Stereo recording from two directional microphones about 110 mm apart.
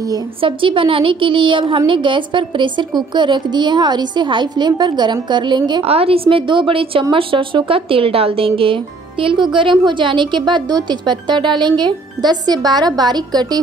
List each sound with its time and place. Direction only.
0.4 s a woman's voice: 50° right (ahead or behind)
5.9 s a woman's voice: 60° right (ahead or behind); by 13.6 s 40° right (ahead or behind)